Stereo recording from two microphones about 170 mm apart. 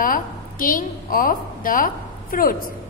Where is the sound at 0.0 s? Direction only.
55° left (ahead or behind).